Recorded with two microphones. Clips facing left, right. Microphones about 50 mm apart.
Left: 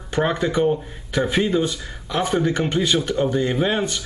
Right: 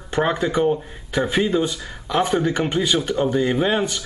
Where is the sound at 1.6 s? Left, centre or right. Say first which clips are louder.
Even; right.